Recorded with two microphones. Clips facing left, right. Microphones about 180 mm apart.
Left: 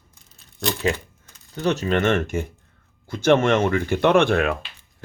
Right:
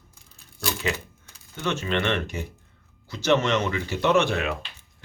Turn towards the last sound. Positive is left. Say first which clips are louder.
# left 4 dB
turn(degrees=50)  # may be behind; listen again after turning